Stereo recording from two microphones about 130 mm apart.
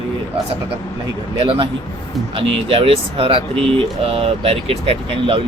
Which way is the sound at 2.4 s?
45° right (ahead or behind).